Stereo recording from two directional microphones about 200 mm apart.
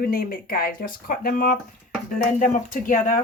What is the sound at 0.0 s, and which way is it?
Speech, 45° left (ahead or behind).